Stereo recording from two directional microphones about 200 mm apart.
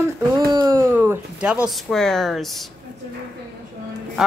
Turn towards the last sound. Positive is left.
turn(degrees=0)  # may be behind; listen again after turning